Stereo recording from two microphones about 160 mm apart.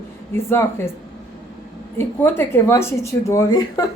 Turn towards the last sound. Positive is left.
turn(degrees=20)  # may be behind; listen again after turning